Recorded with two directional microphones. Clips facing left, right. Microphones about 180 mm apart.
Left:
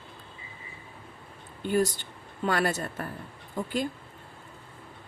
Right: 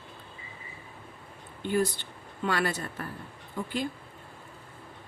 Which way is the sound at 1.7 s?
45° left (ahead or behind).